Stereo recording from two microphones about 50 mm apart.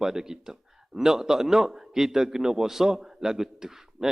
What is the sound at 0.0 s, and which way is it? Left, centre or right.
A man's voice, centre.